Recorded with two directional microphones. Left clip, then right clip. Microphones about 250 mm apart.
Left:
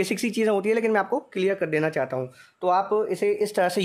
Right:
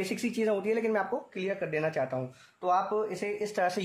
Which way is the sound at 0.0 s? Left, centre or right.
Left.